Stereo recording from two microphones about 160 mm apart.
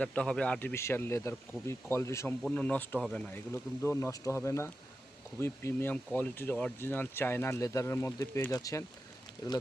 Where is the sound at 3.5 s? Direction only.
15° left (ahead or behind).